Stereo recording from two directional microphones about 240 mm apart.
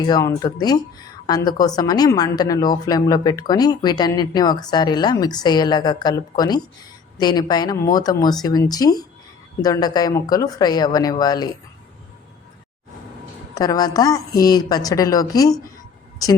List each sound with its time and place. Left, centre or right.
0.0 s a woman's voice: centre
13.6 s a woman's voice: centre